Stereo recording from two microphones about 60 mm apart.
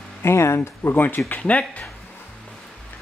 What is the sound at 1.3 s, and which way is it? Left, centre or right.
Speech, left.